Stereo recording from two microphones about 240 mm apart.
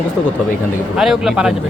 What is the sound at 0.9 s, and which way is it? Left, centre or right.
Speech, centre.